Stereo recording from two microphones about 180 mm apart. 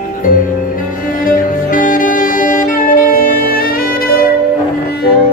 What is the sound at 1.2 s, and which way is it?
Music, 50° left (ahead or behind).